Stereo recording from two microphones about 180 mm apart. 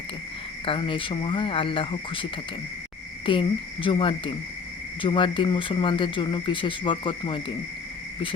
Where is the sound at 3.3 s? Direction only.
30° left (ahead or behind).